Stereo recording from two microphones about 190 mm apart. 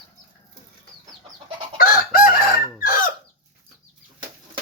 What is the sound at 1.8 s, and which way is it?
Chicken, 50° left (ahead or behind).